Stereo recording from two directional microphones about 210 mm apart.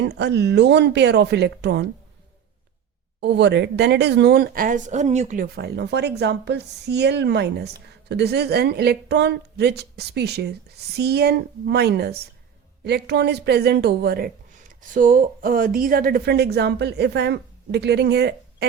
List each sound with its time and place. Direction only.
0.0 s speech: 55° right (ahead or behind)
3.2 s speech: 55° right (ahead or behind); by 5.5 s 35° right (ahead or behind)
5.5 s speech: 50° right (ahead or behind)